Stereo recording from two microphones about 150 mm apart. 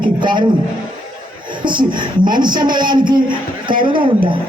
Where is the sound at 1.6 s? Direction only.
30° right (ahead or behind).